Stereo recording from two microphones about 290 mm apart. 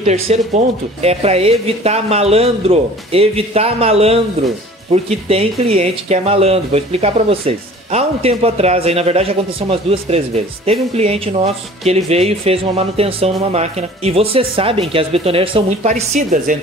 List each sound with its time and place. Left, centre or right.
0.0 s speech: right